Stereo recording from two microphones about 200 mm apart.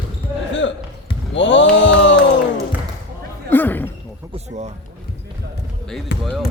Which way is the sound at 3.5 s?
10° left (ahead or behind).